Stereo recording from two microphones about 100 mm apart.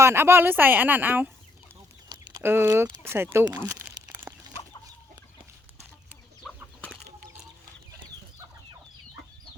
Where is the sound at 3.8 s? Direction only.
20° right (ahead or behind).